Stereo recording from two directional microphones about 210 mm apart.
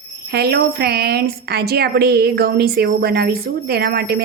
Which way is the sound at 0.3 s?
50° right (ahead or behind).